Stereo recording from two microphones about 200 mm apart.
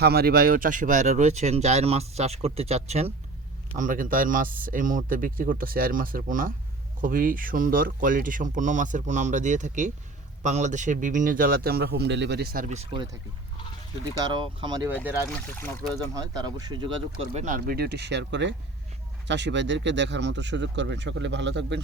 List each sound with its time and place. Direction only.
0.0 s speech: 50° right (ahead or behind)
12.6 s speech: 35° right (ahead or behind)
14.2 s speech: 25° right (ahead or behind)
15.3 s speech: 10° left (ahead or behind)
16.1 s speech: 20° right (ahead or behind); by 21.8 s 60° right (ahead or behind)